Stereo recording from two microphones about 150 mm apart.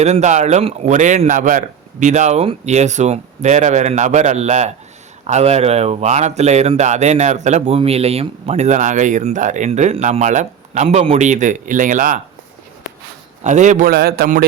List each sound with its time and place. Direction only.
0.0 s speech: 50° right (ahead or behind)
10.8 s a man's voice: 40° right (ahead or behind); by 12.2 s 60° right (ahead or behind)
13.4 s a man's voice: 55° right (ahead or behind); by 14.4 s 75° right (ahead or behind)